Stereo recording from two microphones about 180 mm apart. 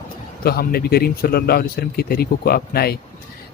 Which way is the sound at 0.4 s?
60° left (ahead or behind).